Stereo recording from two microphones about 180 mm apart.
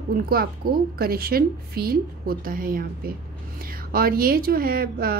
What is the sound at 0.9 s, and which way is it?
A woman's voice, 55° right (ahead or behind).